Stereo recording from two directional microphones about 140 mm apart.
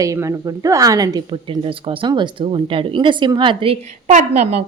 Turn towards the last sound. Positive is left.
turn(degrees=-60)  # may be behind; listen again after turning